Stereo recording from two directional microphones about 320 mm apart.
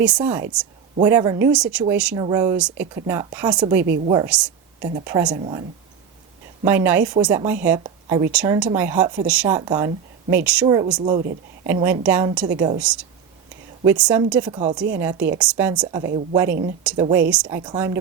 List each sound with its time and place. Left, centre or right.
0.0 s speech: centre
3.8 s a woman's voice: right
4.1 s speech: centre
6.7 s speech: centre